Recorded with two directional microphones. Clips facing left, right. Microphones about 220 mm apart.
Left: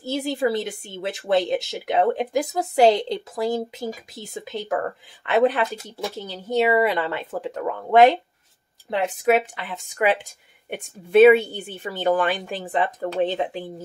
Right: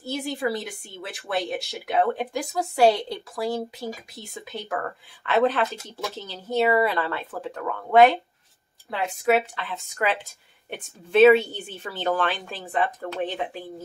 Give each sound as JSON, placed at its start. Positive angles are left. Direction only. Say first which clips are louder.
{"t": 0.0, "sound": "a woman's voice", "louder": "left 4 dB", "side_deg": 20}